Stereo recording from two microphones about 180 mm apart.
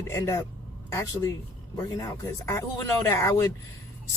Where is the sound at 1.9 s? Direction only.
15° left (ahead or behind).